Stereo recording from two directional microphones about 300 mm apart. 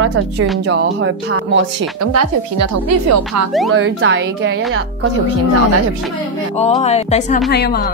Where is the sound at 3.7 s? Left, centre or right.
Right.